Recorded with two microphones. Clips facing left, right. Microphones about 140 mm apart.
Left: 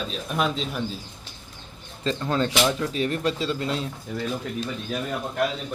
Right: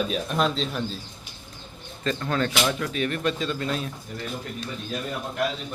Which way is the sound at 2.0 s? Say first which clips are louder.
Left 1 dB; 25° left (ahead or behind).